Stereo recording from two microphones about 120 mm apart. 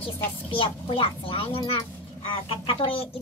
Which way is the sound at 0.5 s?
50° left (ahead or behind).